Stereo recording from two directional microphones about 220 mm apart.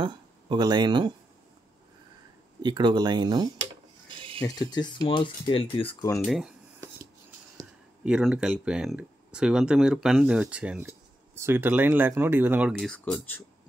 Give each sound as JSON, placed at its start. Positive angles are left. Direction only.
{"t": 0.0, "sound": "speech", "side_deg": -20}
{"t": 2.6, "sound": "speech", "side_deg": -20}
{"t": 4.4, "sound": "speech", "side_deg": 20}
{"t": 6.2, "sound": "a sound", "side_deg": -5}
{"t": 7.5, "sound": "speech", "side_deg": -5}